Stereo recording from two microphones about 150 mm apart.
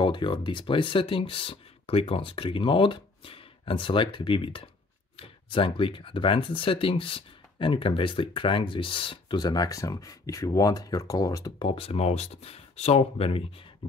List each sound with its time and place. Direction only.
0.0 s speech: 30° left (ahead or behind)
11.7 s speech: 40° left (ahead or behind)